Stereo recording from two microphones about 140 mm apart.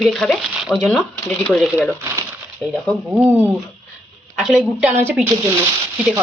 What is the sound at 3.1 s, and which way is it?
Speech, 10° right (ahead or behind).